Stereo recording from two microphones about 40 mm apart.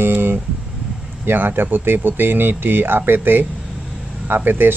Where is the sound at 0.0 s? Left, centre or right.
Right.